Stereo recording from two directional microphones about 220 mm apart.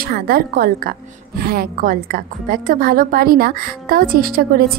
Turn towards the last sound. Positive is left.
turn(degrees=-40)  # may be behind; listen again after turning